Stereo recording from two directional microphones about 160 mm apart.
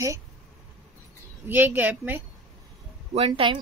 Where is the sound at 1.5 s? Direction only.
10° right (ahead or behind).